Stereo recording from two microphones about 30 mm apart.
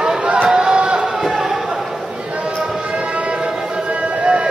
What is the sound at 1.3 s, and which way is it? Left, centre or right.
Chatter, centre.